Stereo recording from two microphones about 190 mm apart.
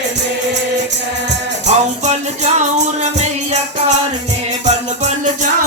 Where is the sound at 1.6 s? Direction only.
35° right (ahead or behind).